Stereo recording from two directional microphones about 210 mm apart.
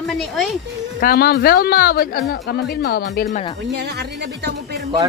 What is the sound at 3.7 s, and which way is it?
Speech, 50° right (ahead or behind).